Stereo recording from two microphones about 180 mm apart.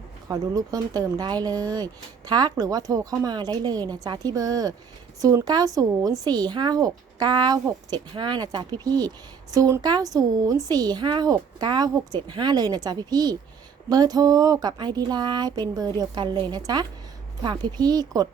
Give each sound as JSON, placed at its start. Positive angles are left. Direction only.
{"t": 0.3, "sound": "a woman's voice", "side_deg": -20}